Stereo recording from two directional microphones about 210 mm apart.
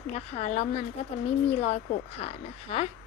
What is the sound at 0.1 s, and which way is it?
A woman's voice, 30° left (ahead or behind).